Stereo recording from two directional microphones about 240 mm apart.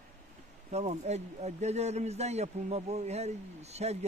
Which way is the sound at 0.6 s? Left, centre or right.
Right.